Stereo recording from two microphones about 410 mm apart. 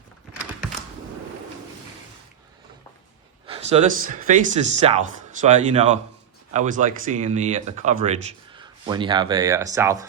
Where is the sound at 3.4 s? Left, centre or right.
Centre.